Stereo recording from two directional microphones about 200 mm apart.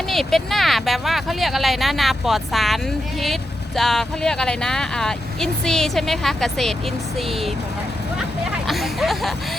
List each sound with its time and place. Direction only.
0.1 s speech: centre (ahead or behind)
8.6 s speech: centre (ahead or behind)